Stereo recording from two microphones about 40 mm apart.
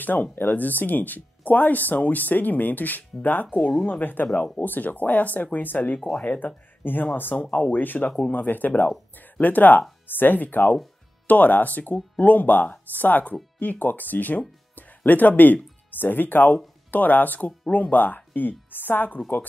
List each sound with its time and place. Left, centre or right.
0.1 s speech: left
0.6 s speech: left
3.8 s speech: left
5.9 s speech: centre
6.2 s speech: left
6.8 s speech: left
7.3 s speech: left
7.7 s speech: left
17.6 s speech: left
17.9 s speech: left